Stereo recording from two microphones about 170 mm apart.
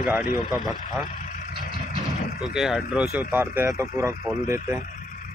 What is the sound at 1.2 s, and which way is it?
Vehicle, 50° left (ahead or behind).